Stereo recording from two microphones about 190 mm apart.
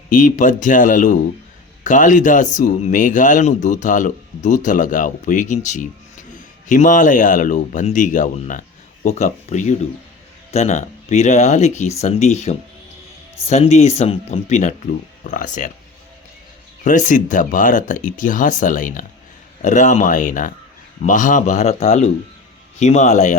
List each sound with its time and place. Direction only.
0.1 s a man's voice: 45° left (ahead or behind)
16.8 s a man's voice: 40° left (ahead or behind)